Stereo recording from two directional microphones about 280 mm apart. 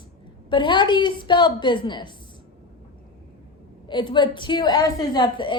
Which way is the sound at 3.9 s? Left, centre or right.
Centre.